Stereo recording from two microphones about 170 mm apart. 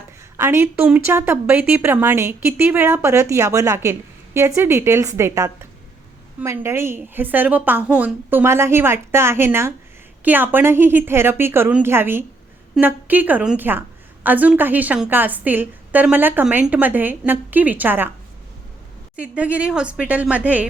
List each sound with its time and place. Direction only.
0.3 s a woman's voice: 15° right (ahead or behind)
19.1 s a woman's voice: 5° right (ahead or behind)